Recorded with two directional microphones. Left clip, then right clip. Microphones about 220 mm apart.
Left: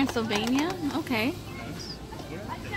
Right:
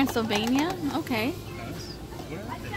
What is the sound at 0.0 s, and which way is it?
Speech, 5° right (ahead or behind).